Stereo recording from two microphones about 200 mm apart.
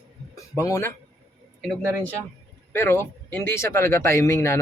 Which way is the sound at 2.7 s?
10° left (ahead or behind).